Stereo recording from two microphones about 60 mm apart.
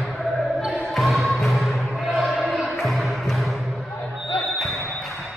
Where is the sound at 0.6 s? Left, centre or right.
Centre.